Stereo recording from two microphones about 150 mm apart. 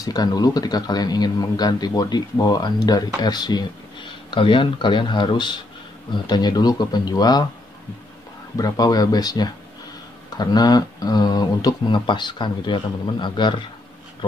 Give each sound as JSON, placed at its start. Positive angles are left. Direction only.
{"t": 0.0, "sound": "speech", "side_deg": 25}
{"t": 8.5, "sound": "speech", "side_deg": 25}